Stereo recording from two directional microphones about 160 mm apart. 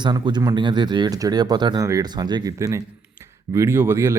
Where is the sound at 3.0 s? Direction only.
15° right (ahead or behind).